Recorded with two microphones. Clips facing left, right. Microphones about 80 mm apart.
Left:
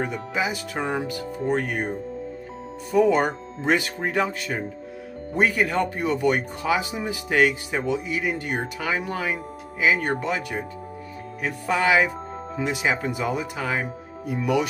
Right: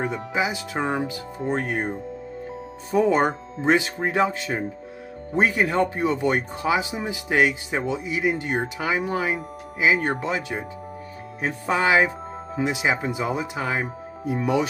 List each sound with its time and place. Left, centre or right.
0.0 s speech: right